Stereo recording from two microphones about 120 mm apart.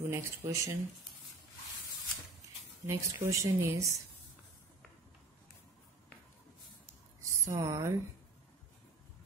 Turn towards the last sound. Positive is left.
turn(degrees=-30)  # may be behind; listen again after turning